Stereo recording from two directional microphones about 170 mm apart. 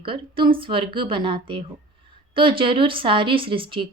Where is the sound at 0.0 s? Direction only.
30° right (ahead or behind).